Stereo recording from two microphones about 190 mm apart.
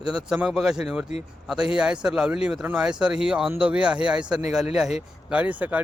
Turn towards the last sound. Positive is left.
turn(degrees=-10)  # may be behind; listen again after turning